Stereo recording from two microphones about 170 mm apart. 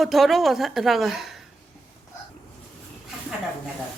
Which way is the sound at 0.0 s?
Centre (ahead or behind).